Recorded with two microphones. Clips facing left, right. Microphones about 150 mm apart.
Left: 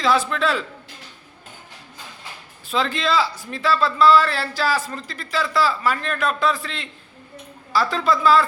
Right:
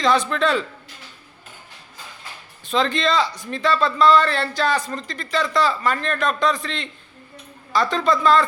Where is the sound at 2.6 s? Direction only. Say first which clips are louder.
Right 2 dB; 5° left (ahead or behind).